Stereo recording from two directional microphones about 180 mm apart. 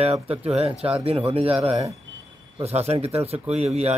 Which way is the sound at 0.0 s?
35° right (ahead or behind).